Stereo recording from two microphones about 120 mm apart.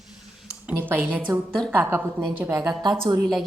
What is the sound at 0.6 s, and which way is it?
A woman's voice, 15° right (ahead or behind).